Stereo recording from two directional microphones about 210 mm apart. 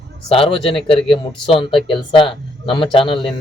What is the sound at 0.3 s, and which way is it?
Speech, 25° left (ahead or behind).